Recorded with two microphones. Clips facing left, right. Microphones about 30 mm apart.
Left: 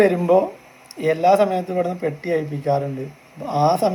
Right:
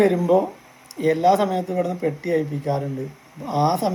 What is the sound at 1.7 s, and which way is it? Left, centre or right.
Speech, left.